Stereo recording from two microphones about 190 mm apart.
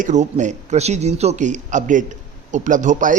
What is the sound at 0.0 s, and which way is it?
A man's voice, 40° right (ahead or behind).